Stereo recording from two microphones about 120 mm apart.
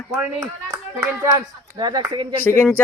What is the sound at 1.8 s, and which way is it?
Speech, 40° right (ahead or behind).